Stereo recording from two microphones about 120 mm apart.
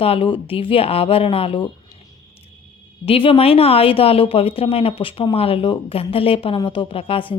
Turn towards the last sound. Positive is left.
turn(degrees=50)  # may be behind; listen again after turning